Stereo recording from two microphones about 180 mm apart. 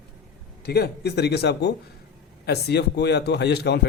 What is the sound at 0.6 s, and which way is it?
A man's voice, 65° left (ahead or behind).